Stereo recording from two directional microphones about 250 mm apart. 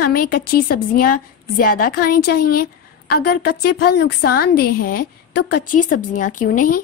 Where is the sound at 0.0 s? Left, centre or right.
Left.